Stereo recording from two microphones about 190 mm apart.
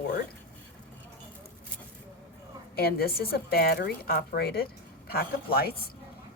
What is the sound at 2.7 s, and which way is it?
A woman's voice, 55° left (ahead or behind).